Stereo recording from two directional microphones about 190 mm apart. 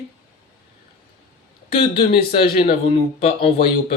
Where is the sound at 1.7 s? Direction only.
30° left (ahead or behind).